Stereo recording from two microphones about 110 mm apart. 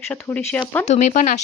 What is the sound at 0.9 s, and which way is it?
Speech, 90° left.